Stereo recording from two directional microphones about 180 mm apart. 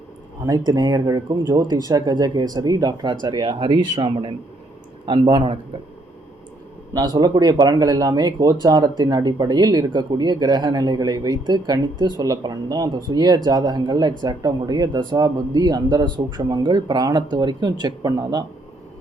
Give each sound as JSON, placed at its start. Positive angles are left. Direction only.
{"t": 0.4, "sound": "speech", "side_deg": -20}
{"t": 6.9, "sound": "speech", "side_deg": -20}